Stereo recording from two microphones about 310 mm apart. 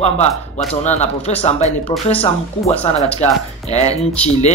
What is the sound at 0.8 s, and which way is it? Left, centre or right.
Speech, left.